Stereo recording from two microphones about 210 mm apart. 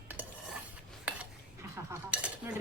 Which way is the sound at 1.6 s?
10° right (ahead or behind).